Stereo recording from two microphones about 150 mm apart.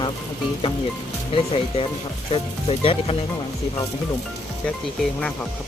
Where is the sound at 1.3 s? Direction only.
40° left (ahead or behind).